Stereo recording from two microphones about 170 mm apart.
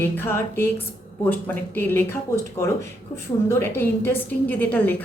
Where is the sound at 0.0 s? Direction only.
15° left (ahead or behind).